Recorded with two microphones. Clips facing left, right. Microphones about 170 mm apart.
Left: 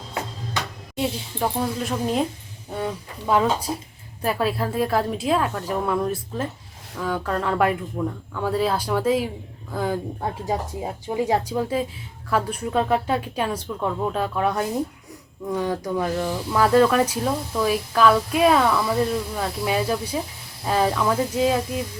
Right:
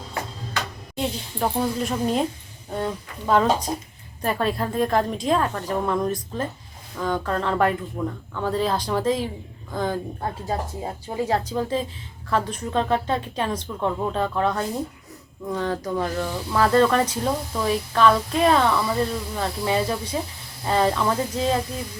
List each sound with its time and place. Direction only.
0.9 s a woman's voice: centre (ahead or behind)